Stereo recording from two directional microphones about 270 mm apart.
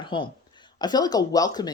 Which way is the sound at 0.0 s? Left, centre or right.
Centre.